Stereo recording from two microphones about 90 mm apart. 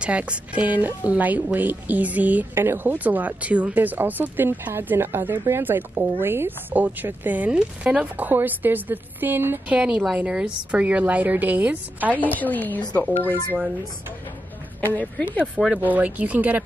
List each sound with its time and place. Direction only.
0.0 s speech: 15° right (ahead or behind)
9.8 s a woman's voice: 10° right (ahead or behind)
12.1 s a woman's voice: 20° left (ahead or behind)
15.0 s speech: 20° left (ahead or behind)
15.8 s a woman's voice: 15° right (ahead or behind)